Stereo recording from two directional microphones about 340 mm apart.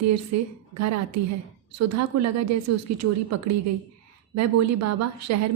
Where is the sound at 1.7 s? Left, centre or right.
Right.